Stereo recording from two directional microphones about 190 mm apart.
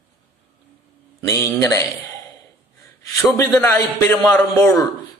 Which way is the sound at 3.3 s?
15° left (ahead or behind).